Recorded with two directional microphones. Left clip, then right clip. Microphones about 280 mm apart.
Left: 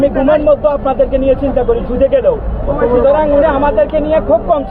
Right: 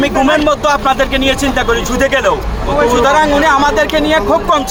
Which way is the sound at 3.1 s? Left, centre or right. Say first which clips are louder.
Right 1 dB; centre.